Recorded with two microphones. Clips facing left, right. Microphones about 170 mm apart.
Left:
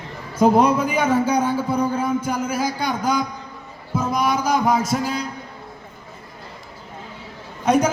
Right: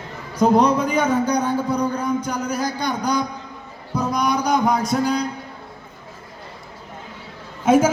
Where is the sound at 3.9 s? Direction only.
5° left (ahead or behind).